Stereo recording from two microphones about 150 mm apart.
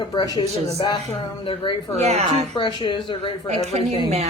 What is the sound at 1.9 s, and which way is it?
Speech, 45° right (ahead or behind).